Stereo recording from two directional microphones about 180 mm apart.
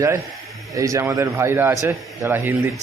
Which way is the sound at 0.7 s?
20° right (ahead or behind).